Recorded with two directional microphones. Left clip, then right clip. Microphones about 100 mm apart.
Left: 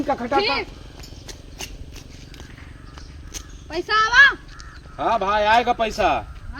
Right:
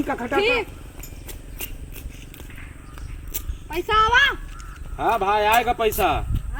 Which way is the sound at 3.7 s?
25° left (ahead or behind).